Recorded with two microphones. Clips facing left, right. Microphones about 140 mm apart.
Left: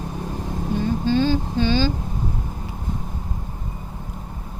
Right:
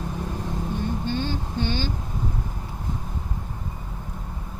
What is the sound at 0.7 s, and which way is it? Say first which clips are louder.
Vehicle: left 8 dB; 90° left.